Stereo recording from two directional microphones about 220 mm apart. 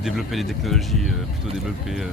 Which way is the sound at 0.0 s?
Centre (ahead or behind).